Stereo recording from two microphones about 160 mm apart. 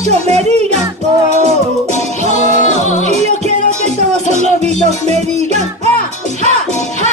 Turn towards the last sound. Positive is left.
turn(degrees=-45)  # may be behind; listen again after turning